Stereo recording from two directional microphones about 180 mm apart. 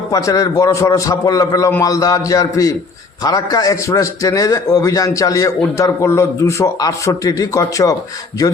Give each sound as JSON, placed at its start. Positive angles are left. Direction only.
{"t": 0.1, "sound": "a man's voice", "side_deg": 20}